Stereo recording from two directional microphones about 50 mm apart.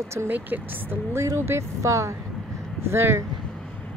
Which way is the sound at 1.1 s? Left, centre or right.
Right.